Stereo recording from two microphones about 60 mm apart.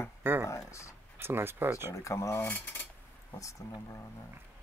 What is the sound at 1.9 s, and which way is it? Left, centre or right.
Speech, left.